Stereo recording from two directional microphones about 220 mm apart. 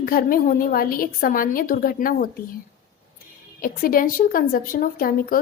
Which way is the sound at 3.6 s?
40° left (ahead or behind).